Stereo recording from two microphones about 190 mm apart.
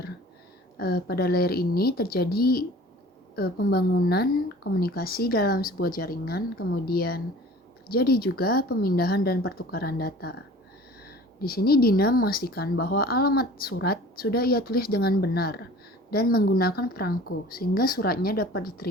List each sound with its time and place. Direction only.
0.8 s a woman's voice: 55° left (ahead or behind)